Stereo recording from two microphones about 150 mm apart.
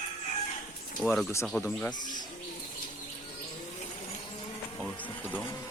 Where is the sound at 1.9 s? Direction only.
30° left (ahead or behind).